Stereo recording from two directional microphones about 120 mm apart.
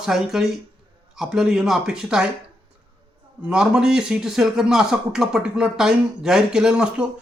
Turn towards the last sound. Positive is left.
turn(degrees=-5)  # may be behind; listen again after turning